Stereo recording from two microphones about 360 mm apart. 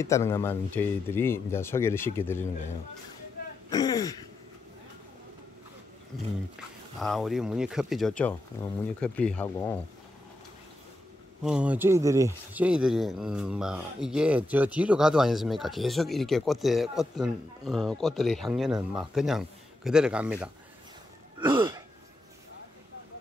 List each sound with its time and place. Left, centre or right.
0.0 s speech: centre
3.4 s throat clearing: left
3.7 s speech: centre
7.0 s speech: centre
11.4 s speech: centre
21.4 s throat clearing: centre